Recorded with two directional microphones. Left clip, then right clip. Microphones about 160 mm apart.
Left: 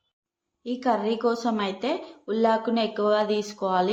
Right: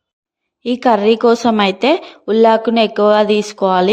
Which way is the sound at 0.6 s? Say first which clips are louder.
Right 13 dB; 60° right (ahead or behind).